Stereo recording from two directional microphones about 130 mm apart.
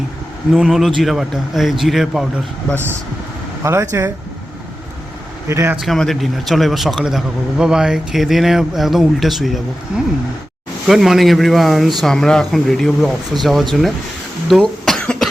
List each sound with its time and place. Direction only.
0.5 s speech: centre (ahead or behind)
3.6 s speech: 20° right (ahead or behind)
5.5 s speech: 20° right (ahead or behind)
5.7 s speech: centre (ahead or behind)
14.6 s cough: 5° left (ahead or behind)